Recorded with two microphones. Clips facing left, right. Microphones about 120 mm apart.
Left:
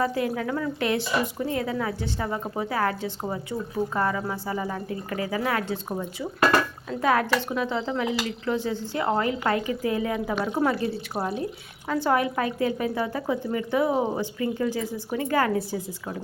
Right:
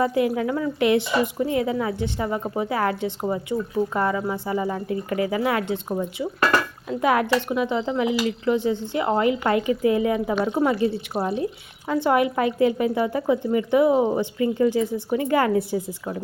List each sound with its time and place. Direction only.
0.0 s speech: 20° right (ahead or behind)
3.2 s speech: 10° right (ahead or behind)
6.9 s speech: 15° right (ahead or behind)
11.1 s speech: 10° right (ahead or behind)
14.2 s speech: 25° right (ahead or behind)